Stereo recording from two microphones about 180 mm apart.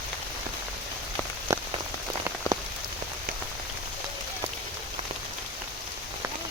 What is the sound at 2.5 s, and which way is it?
Rain on surface, 20° left (ahead or behind).